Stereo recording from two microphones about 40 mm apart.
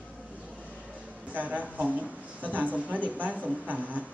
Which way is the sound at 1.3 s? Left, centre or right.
Right.